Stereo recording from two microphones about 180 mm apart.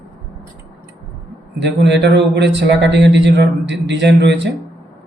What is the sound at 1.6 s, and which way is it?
A man's voice, 75° right (ahead or behind).